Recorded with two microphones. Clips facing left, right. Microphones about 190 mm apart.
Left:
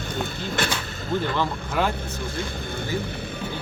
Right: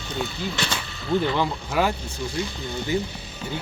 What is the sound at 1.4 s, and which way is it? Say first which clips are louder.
Speech: right 1 dB; 10° right (ahead or behind).